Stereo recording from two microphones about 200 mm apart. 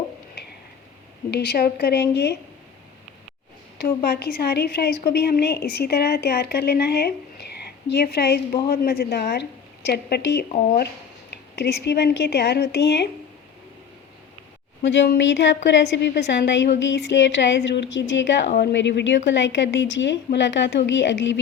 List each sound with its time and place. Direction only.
1.3 s a woman's voice: 55° left (ahead or behind)
3.8 s a woman's voice: 50° left (ahead or behind)
11.5 s a woman's voice: 55° left (ahead or behind)
14.8 s a woman's voice: 60° left (ahead or behind)